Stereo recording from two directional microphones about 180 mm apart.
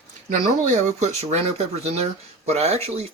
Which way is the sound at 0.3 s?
40° right (ahead or behind).